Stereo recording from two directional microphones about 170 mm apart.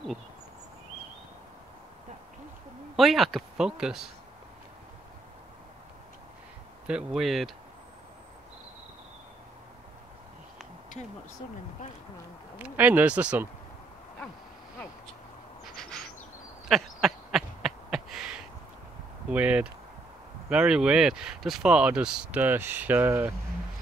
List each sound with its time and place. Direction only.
3.0 s speech: centre (ahead or behind)
6.9 s speech: 5° right (ahead or behind)
12.5 s speech: 10° right (ahead or behind)
15.6 s bird: centre (ahead or behind)
16.6 s a sound: centre (ahead or behind)
19.3 s speech: 5° right (ahead or behind)